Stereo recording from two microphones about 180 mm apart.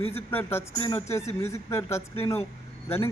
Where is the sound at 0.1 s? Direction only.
10° left (ahead or behind).